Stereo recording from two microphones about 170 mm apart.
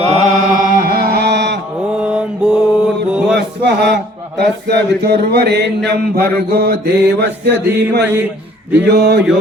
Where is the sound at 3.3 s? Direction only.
75° right (ahead or behind).